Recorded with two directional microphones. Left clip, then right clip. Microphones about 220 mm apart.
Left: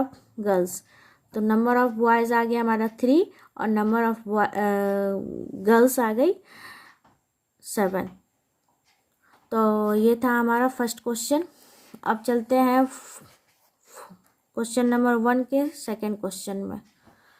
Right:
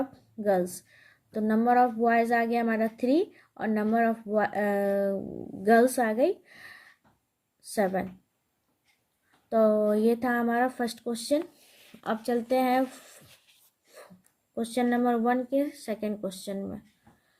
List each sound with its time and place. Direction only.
0.1 s a woman's voice: 20° left (ahead or behind)
9.5 s a woman's voice: 20° left (ahead or behind)
14.5 s a woman's voice: 20° left (ahead or behind)